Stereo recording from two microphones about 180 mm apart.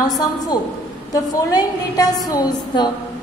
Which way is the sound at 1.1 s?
20° left (ahead or behind).